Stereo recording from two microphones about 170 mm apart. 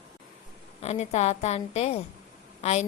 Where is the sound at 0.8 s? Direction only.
40° left (ahead or behind).